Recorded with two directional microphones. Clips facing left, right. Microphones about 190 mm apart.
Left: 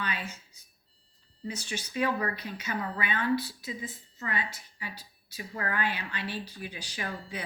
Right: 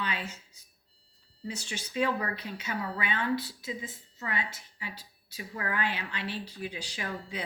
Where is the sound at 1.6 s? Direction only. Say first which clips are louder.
Even; 25° right (ahead or behind).